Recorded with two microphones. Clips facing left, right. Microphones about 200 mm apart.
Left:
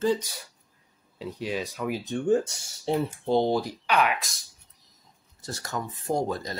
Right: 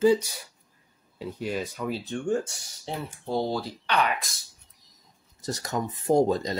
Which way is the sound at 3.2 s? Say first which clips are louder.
Left 3 dB; 20° left (ahead or behind).